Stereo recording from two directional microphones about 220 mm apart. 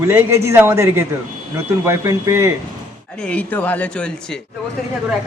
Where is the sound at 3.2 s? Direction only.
5° left (ahead or behind).